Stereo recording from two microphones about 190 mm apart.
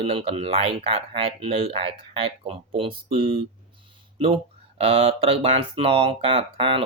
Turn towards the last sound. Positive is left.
turn(degrees=-30)  # may be behind; listen again after turning